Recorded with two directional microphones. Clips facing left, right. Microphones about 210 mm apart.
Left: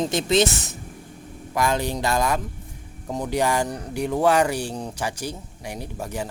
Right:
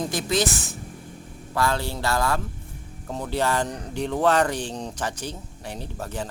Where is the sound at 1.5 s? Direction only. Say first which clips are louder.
Left 2 dB; 15° left (ahead or behind).